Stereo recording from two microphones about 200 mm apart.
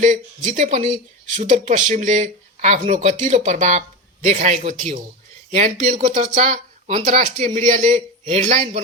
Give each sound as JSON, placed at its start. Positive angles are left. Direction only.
{"t": 0.0, "sound": "speech", "side_deg": -40}